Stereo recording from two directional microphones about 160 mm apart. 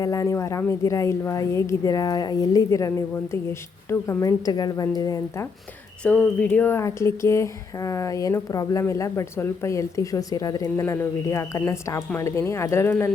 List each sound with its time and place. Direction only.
0.0 s speech: 20° left (ahead or behind)
6.0 s speech: 10° left (ahead or behind)